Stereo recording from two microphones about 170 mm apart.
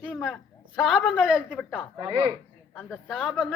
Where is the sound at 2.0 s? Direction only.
30° right (ahead or behind).